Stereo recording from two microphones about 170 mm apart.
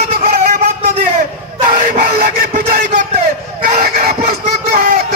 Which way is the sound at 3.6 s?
65° right (ahead or behind).